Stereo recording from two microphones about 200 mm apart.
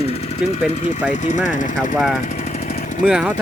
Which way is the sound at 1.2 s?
40° left (ahead or behind).